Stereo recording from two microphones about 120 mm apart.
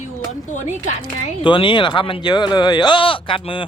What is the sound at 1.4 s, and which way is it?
Speech, 45° left (ahead or behind).